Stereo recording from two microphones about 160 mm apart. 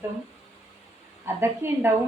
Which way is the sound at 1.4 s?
15° right (ahead or behind).